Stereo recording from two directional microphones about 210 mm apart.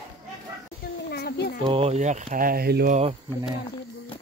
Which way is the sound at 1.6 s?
25° right (ahead or behind).